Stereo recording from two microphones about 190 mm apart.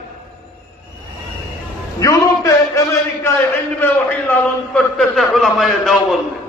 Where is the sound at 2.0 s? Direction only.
15° left (ahead or behind).